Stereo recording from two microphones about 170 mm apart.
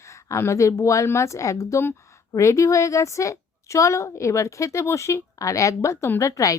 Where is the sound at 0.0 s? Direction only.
15° left (ahead or behind).